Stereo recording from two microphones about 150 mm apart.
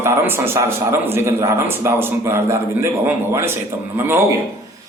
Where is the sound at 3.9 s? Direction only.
15° right (ahead or behind).